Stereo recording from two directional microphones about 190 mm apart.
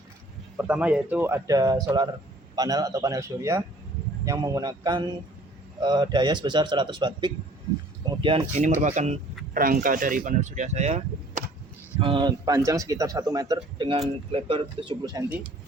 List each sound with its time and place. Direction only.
0.5 s a man's voice: 10° right (ahead or behind)